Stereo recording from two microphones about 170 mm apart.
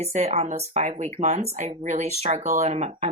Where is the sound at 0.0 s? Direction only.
40° right (ahead or behind).